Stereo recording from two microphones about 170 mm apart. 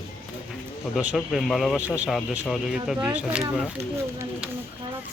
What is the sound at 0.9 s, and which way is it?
Speech, 5° right (ahead or behind).